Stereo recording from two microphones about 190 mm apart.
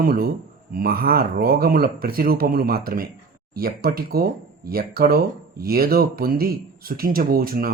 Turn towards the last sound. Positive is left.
turn(degrees=-50)  # may be behind; listen again after turning